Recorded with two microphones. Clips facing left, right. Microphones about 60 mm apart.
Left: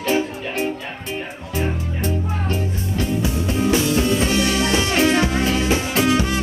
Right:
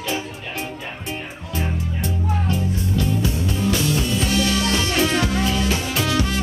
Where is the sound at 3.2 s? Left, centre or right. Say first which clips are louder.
Left 2 dB; left.